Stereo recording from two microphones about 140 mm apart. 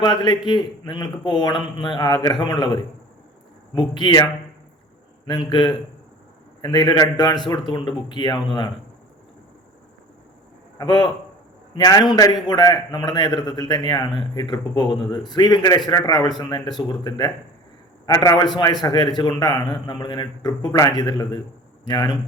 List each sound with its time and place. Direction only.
0.0 s a man's voice: 30° left (ahead or behind)
3.8 s a man's voice: 30° left (ahead or behind)
10.8 s a man's voice: 30° left (ahead or behind)